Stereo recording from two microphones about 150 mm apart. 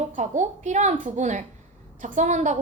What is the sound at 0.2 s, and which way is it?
A woman's voice, 50° right (ahead or behind).